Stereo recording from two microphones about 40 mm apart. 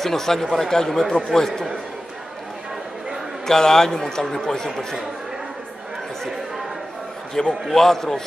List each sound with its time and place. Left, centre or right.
0.0 s a man's voice: centre
3.4 s a man's voice: centre
7.3 s a man's voice: centre